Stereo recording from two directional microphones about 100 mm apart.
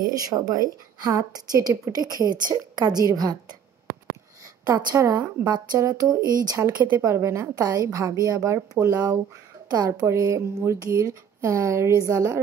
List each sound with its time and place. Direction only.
0.2 s a woman's voice: 40° right (ahead or behind)
4.7 s a woman's voice: 35° right (ahead or behind)
6.7 s a woman's voice: 15° right (ahead or behind)
7.0 s a woman's voice: 30° right (ahead or behind)